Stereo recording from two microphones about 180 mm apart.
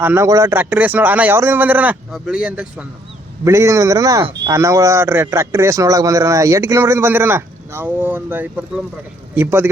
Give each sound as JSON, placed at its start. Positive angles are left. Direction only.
{"t": 0.0, "sound": "speech", "side_deg": -15}